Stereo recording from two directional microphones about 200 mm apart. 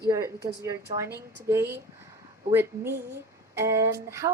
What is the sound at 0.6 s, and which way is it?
A woman's voice, 15° right (ahead or behind).